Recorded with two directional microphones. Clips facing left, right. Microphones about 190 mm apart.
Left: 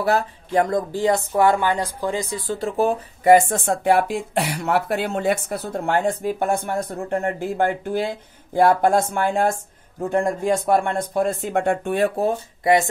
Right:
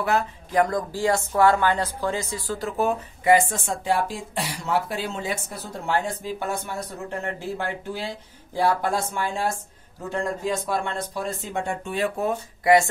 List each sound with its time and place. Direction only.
0.0 s speech: 30° left (ahead or behind)
3.3 s speech: 50° left (ahead or behind)
12.2 s speech: 25° left (ahead or behind)